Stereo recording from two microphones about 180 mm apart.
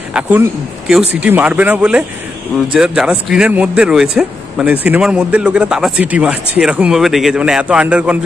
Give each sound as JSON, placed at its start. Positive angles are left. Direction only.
{"t": 0.1, "sound": "a man's voice", "side_deg": -10}